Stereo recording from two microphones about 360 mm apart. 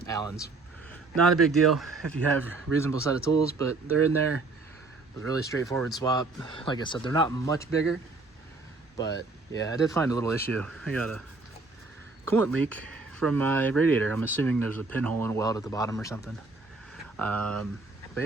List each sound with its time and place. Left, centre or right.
0.0 s speech: centre
3.8 s speech: right
5.3 s speech: centre
9.0 s speech: centre
12.5 s speech: centre